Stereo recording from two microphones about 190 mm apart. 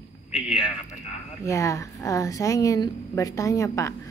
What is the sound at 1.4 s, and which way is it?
A woman's voice, 15° left (ahead or behind).